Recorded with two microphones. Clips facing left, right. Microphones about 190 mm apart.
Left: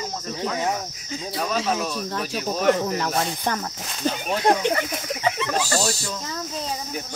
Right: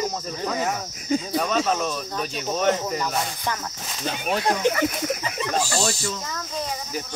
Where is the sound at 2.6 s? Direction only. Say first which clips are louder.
Left 3 dB; 65° left (ahead or behind).